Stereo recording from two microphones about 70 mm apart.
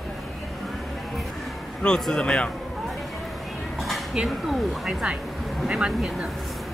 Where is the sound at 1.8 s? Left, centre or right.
Centre.